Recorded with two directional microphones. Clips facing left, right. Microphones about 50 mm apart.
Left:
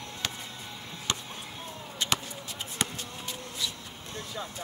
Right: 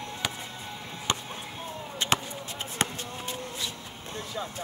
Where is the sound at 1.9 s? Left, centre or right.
Right.